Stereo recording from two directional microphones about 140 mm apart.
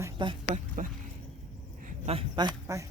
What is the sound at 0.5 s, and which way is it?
Speech, 70° right (ahead or behind).